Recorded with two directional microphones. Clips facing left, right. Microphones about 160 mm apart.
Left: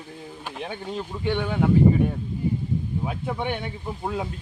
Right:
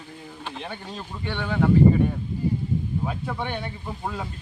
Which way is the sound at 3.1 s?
15° left (ahead or behind).